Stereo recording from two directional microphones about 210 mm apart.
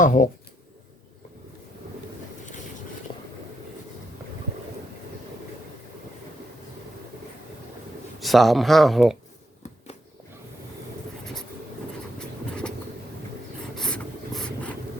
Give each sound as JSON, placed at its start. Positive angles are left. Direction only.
{"t": 0.0, "sound": "speech", "side_deg": 40}
{"t": 3.1, "sound": "vehicle", "side_deg": 25}
{"t": 8.2, "sound": "speech", "side_deg": 0}
{"t": 12.2, "sound": "a sound", "side_deg": 5}
{"t": 13.7, "sound": "vehicle", "side_deg": 5}